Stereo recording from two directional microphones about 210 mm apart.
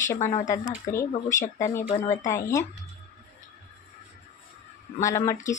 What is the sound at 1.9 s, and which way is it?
Speech, 35° left (ahead or behind).